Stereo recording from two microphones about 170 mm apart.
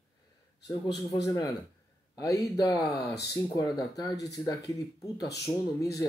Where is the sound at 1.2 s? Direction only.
20° left (ahead or behind).